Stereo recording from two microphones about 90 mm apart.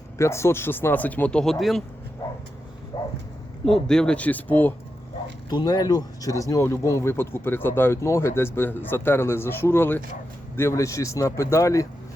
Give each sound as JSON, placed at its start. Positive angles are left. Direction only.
{"t": 0.2, "sound": "speech", "side_deg": 30}
{"t": 2.9, "sound": "dog", "side_deg": 85}
{"t": 3.7, "sound": "speech", "side_deg": 5}
{"t": 5.5, "sound": "speech", "side_deg": 50}